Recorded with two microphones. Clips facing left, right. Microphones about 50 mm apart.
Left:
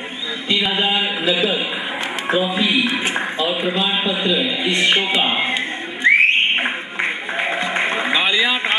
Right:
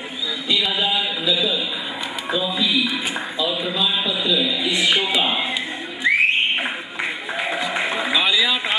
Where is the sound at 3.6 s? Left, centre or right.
Left.